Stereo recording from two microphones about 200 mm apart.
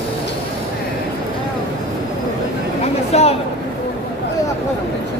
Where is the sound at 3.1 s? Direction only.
30° left (ahead or behind).